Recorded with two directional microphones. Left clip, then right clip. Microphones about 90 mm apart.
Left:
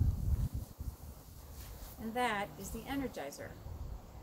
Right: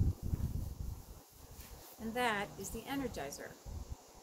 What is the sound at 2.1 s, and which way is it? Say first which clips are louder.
Speech: even; 40° right (ahead or behind).